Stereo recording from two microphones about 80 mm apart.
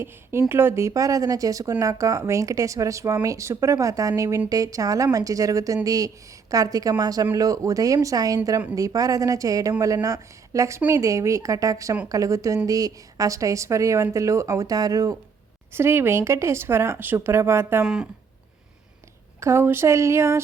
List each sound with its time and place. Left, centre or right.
0.0 s a woman's voice: right
10.8 s speech: right
11.0 s a woman's voice: right
15.7 s speech: right
17.8 s speech: centre
19.4 s speech: right